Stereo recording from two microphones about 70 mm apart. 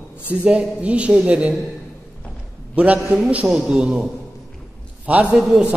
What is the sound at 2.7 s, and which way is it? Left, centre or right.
A man's voice, centre.